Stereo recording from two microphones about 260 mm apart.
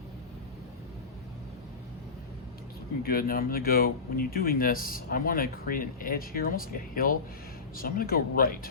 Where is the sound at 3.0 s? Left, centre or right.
Left.